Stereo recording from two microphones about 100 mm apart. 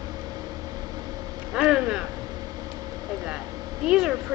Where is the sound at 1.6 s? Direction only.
10° right (ahead or behind).